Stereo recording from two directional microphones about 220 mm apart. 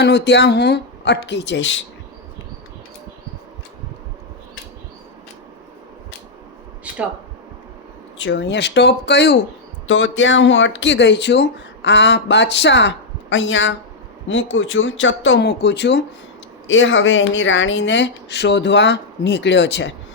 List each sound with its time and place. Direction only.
0.0 s a woman's voice: 50° left (ahead or behind)
8.2 s a woman's voice: 55° left (ahead or behind)